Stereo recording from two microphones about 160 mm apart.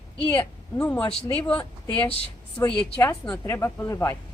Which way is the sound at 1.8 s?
30° left (ahead or behind).